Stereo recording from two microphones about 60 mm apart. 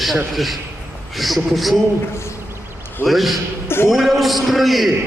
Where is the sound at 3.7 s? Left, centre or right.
Left.